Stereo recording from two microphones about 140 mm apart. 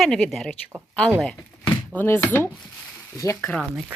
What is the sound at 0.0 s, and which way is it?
Speech, centre (ahead or behind).